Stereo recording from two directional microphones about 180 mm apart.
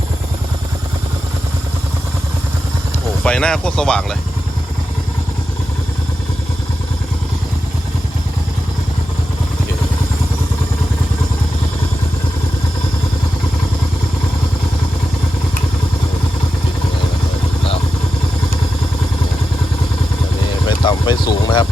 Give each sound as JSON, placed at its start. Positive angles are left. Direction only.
{"t": 3.2, "sound": "speech", "side_deg": 5}
{"t": 20.7, "sound": "vehicle", "side_deg": 25}